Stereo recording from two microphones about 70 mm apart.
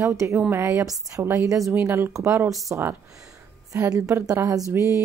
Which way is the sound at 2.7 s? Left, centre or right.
Right.